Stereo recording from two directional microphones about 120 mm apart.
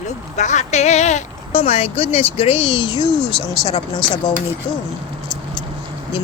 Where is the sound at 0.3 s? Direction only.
75° left (ahead or behind); by 3.8 s 40° left (ahead or behind).